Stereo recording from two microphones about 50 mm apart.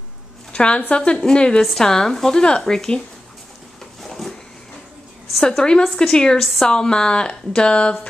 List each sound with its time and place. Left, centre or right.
0.5 s a woman's voice: left
1.6 s speech: centre
4.0 s a sound: centre
5.6 s speech: centre
6.4 s speech: centre
6.7 s speech: centre